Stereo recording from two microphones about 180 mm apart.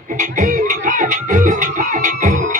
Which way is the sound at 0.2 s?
45° right (ahead or behind).